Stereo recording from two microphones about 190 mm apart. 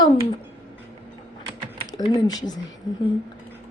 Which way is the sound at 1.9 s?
20° left (ahead or behind).